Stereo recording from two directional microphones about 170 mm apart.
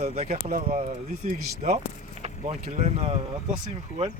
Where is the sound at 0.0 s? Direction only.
40° right (ahead or behind).